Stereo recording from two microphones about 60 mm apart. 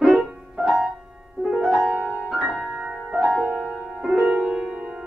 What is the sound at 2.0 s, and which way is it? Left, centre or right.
Music, centre.